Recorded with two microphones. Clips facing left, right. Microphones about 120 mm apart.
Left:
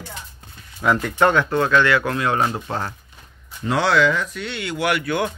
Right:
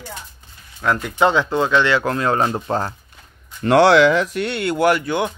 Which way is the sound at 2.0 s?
35° right (ahead or behind).